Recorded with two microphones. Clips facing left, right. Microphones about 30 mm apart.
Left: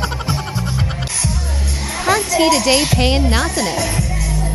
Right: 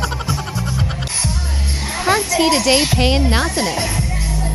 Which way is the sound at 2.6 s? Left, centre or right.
Centre.